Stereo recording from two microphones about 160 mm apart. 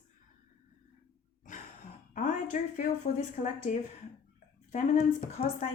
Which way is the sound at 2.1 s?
50° left (ahead or behind).